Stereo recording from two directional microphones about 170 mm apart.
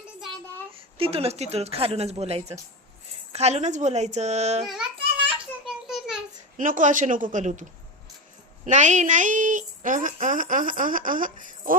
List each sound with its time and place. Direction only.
0.8 s a woman's voice: 35° right (ahead or behind)
4.6 s speech: centre (ahead or behind)
5.3 s a sound: 5° right (ahead or behind)
6.6 s speech: 50° right (ahead or behind)
8.6 s speech: 45° right (ahead or behind)